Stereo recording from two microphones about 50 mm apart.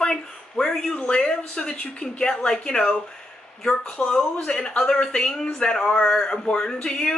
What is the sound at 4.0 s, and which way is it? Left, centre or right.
Speech, centre.